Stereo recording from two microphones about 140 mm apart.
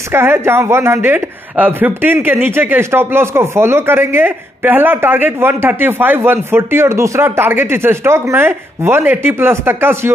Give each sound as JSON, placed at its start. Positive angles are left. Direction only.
{"t": 0.1, "sound": "speech", "side_deg": -15}